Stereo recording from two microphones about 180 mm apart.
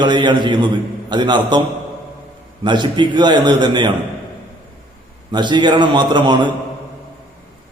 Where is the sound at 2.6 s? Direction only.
25° right (ahead or behind).